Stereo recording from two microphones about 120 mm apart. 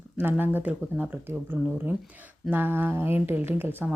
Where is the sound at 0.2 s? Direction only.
15° right (ahead or behind).